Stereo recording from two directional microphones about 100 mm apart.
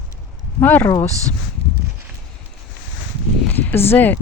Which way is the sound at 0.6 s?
20° left (ahead or behind).